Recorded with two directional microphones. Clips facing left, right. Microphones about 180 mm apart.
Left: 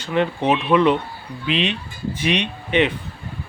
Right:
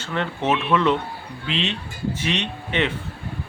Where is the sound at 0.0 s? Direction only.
15° left (ahead or behind).